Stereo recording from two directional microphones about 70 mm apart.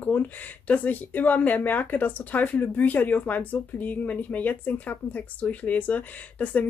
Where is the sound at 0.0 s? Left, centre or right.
Left.